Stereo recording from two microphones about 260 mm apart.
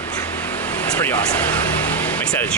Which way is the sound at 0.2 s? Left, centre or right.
Centre.